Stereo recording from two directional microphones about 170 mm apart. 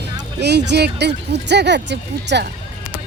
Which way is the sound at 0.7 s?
80° right.